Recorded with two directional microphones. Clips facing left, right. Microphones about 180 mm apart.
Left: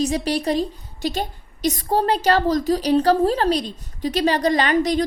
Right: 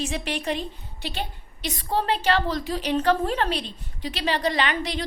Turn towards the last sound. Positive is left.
turn(degrees=45)  # may be behind; listen again after turning